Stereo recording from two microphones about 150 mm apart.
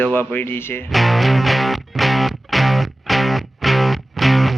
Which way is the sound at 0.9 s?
Centre (ahead or behind).